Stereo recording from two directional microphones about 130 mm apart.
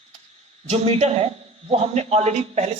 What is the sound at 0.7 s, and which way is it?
A man's voice, 55° right (ahead or behind).